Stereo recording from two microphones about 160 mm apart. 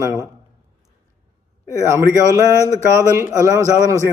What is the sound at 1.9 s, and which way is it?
Speech, 20° right (ahead or behind).